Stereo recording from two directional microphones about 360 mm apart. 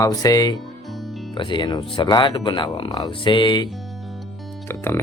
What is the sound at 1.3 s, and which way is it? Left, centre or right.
Speech, centre.